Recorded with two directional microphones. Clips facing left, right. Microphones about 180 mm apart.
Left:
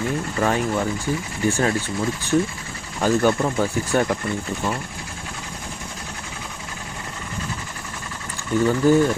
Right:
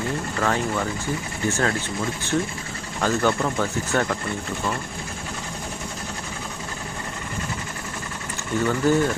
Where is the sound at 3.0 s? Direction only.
15° left (ahead or behind).